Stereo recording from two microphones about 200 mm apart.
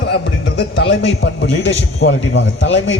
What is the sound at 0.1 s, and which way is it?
A man's voice, 60° left (ahead or behind).